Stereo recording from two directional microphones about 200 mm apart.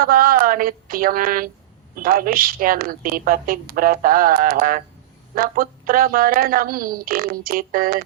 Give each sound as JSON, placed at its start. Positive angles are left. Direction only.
{"t": 0.0, "sound": "a woman's voice", "side_deg": -45}